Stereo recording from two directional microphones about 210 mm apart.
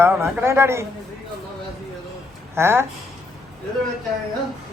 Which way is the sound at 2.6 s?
10° right (ahead or behind).